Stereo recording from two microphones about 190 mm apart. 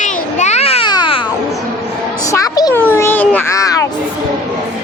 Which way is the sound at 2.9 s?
10° left (ahead or behind).